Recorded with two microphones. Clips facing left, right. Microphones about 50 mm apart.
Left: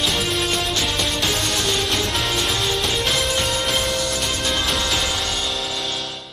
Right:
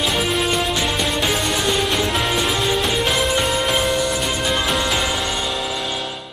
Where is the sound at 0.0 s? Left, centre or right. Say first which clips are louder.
Right 2 dB; centre.